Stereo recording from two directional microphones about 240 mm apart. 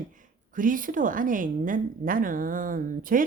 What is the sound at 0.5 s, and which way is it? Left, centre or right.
A woman's voice, right.